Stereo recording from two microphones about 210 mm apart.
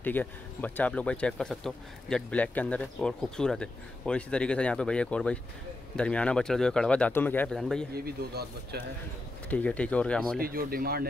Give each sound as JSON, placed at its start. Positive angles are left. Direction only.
{"t": 0.0, "sound": "speech", "side_deg": 10}
{"t": 7.9, "sound": "speech", "side_deg": -45}
{"t": 9.5, "sound": "speech", "side_deg": 5}
{"t": 10.4, "sound": "speech", "side_deg": -45}